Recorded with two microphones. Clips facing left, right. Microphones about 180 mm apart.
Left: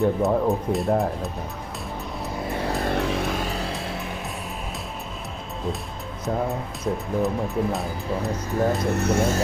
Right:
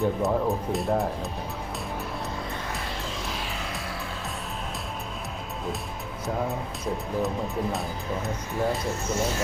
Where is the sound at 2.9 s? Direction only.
65° left (ahead or behind); by 4.1 s 20° left (ahead or behind).